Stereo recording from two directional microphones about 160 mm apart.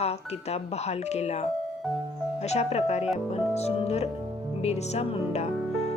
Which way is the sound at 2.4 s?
45° left (ahead or behind).